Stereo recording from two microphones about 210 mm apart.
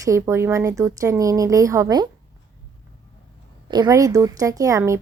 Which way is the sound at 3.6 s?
20° right (ahead or behind).